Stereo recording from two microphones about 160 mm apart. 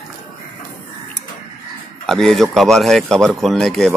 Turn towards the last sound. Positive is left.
turn(degrees=0)  # may be behind; listen again after turning